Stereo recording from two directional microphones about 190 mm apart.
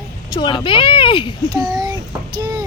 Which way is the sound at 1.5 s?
20° right (ahead or behind).